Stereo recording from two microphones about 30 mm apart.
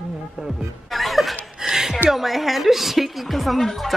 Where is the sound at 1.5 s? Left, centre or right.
Centre.